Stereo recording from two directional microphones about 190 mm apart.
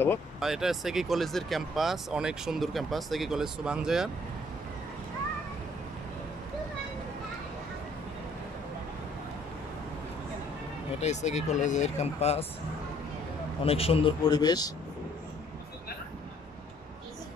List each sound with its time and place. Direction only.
0.4 s speech: centre (ahead or behind)
11.0 s speech: 35° left (ahead or behind)
13.7 s a man's voice: 30° left (ahead or behind)